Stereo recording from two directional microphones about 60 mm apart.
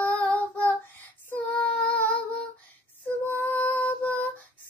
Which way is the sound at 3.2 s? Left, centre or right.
Left.